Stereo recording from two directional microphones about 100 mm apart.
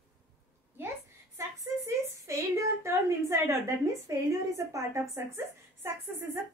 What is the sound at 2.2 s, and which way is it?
A woman's voice, 30° right (ahead or behind).